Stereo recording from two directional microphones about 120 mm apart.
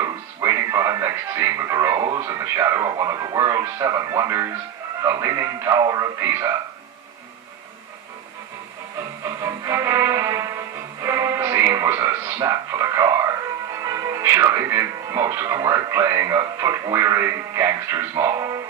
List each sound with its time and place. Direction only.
0.0 s music: 25° right (ahead or behind)
2.0 s speech: 40° right (ahead or behind)
2.2 s speech: 30° right (ahead or behind)
9.2 s music: 30° right (ahead or behind)
11.9 s a sound: 30° right (ahead or behind)
13.8 s music: 30° right (ahead or behind)
14.2 s speech: 25° right (ahead or behind)